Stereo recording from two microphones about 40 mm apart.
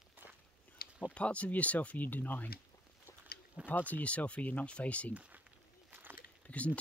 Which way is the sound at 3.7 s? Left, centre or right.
Left.